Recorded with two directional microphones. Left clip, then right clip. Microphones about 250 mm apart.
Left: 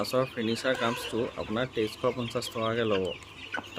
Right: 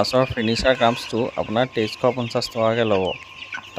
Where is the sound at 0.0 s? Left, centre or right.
Right.